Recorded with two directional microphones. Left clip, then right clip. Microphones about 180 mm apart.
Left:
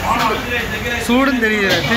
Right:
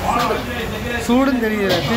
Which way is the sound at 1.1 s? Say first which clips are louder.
Left 2 dB; 10° right (ahead or behind).